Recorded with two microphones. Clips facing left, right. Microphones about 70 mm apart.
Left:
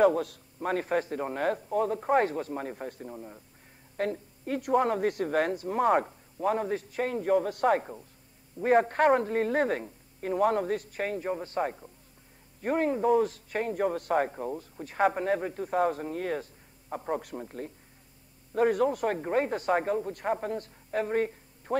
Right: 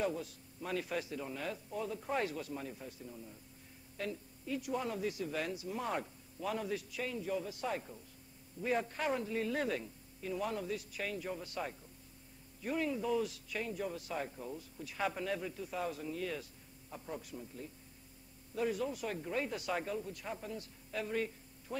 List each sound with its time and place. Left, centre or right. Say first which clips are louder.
0.0 s speech: left 14 dB; left
16.9 s speech: left 12 dB; left